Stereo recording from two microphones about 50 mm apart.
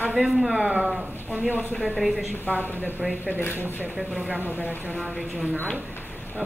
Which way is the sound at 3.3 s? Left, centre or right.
Left.